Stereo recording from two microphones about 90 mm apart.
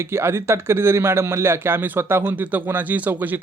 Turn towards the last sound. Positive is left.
turn(degrees=-20)  # may be behind; listen again after turning